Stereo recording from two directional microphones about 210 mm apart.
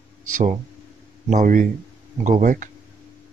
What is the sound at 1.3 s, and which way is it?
Speech, 40° right (ahead or behind).